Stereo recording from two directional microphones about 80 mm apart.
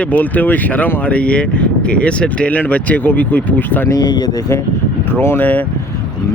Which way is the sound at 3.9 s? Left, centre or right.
Left.